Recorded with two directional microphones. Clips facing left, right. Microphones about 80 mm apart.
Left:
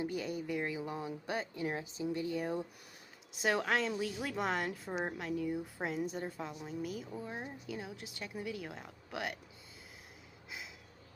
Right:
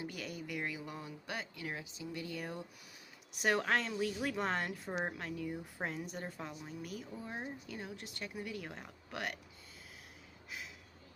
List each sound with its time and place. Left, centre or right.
0.0 s speech: left
3.4 s speech: centre
4.7 s a woman's voice: centre
5.1 s speech: centre
6.8 s speech: centre
7.2 s speech: centre